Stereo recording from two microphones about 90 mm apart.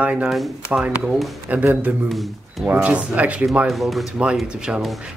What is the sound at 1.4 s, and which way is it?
Speech, 15° right (ahead or behind).